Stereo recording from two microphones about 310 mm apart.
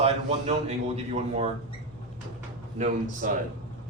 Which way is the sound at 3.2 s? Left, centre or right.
Right.